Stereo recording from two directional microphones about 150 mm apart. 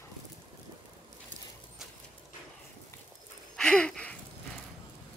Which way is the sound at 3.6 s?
5° left (ahead or behind).